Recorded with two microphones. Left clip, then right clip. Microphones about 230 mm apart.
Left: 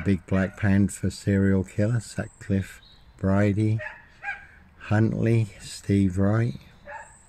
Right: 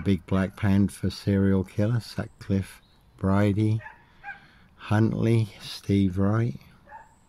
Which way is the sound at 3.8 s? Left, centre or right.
Left.